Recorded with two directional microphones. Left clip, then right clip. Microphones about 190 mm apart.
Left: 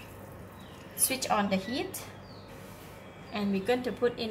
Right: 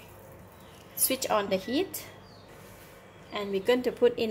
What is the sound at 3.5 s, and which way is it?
Speech, 40° right (ahead or behind).